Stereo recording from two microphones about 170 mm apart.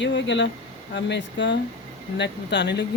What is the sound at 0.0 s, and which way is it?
Speech, 90° left.